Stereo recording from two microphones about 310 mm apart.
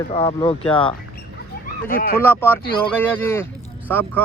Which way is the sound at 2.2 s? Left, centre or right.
Centre.